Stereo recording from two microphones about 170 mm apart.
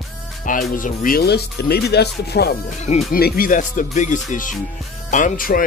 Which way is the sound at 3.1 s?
60° left (ahead or behind).